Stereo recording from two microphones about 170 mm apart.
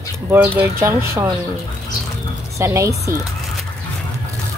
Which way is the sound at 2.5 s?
15° right (ahead or behind).